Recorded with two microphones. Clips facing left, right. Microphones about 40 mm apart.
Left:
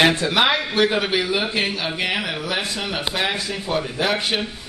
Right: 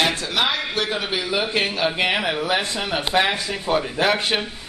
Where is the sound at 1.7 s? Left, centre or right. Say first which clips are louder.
Right 3 dB; centre.